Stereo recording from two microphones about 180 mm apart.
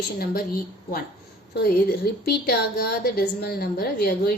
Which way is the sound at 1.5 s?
60° left (ahead or behind).